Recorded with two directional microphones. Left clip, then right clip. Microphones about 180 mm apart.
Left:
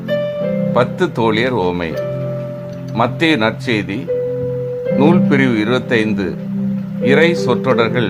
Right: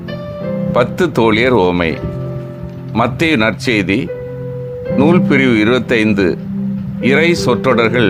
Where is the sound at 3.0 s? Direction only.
30° right (ahead or behind).